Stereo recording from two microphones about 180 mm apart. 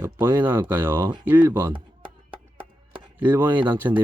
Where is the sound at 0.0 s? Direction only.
15° right (ahead or behind).